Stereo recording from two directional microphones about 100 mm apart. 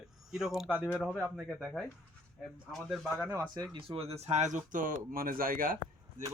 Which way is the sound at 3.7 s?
70° right (ahead or behind).